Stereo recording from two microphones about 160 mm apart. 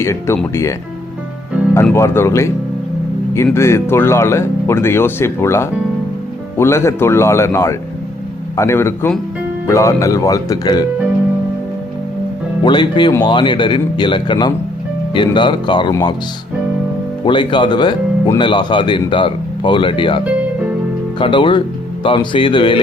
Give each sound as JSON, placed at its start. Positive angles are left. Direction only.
{"t": 0.0, "sound": "speech", "side_deg": 15}
{"t": 1.7, "sound": "speech", "side_deg": 15}
{"t": 12.6, "sound": "speech", "side_deg": 30}
{"t": 17.2, "sound": "speech", "side_deg": 30}